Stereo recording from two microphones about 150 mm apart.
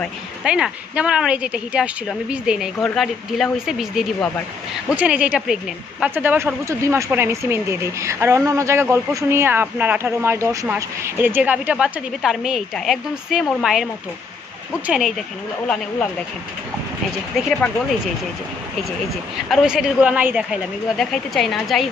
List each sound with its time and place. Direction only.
0.4 s a woman's voice: 5° right (ahead or behind)
14.9 s a woman's voice: 5° right (ahead or behind)
17.4 s a woman's voice: 5° left (ahead or behind)
19.5 s a woman's voice: 5° right (ahead or behind)